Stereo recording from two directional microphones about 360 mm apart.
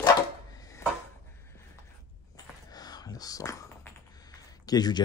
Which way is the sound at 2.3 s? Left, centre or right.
Centre.